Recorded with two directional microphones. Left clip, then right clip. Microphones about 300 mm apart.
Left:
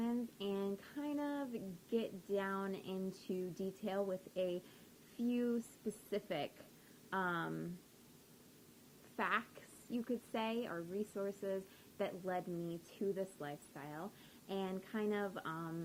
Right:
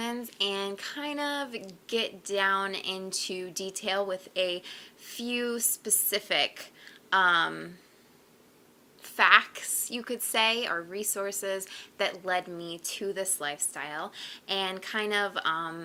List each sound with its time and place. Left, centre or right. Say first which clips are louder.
0.0 s a woman's voice: right 11 dB; centre
9.1 s a woman's voice: right 18 dB; centre
12.5 s speech: right 7 dB; right
12.9 s a woman's voice: right 9 dB; centre